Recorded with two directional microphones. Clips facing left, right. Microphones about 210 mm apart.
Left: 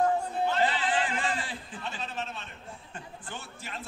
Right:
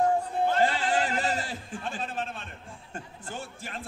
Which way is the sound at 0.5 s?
45° right (ahead or behind).